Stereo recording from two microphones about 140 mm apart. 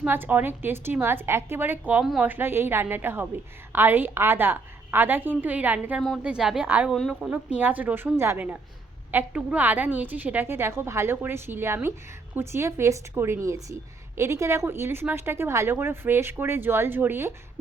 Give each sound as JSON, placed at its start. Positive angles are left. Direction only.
{"t": 0.0, "sound": "a woman's voice", "side_deg": -15}